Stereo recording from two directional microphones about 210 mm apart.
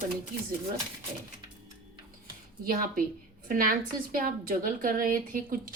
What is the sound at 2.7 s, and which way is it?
A woman's voice, 40° right (ahead or behind).